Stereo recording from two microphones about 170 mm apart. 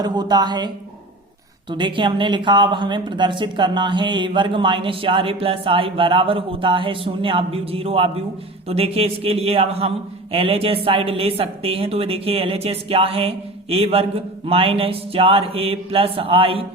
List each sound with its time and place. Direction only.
0.0 s speech: 25° right (ahead or behind)
1.7 s speech: 30° right (ahead or behind)